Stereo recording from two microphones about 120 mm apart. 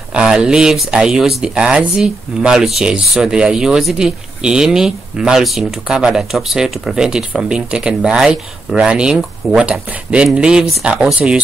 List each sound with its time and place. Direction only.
0.1 s speech: 10° right (ahead or behind)